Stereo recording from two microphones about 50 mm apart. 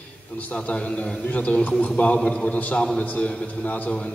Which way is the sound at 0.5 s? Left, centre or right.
Left.